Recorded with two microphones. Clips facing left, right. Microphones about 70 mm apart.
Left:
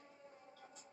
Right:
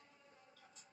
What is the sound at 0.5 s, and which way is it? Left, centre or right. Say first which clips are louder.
Music: left 6 dB; left.